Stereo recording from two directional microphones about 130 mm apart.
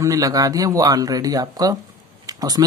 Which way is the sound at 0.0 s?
25° right (ahead or behind).